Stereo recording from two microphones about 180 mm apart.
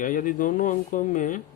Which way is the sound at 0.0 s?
45° left (ahead or behind).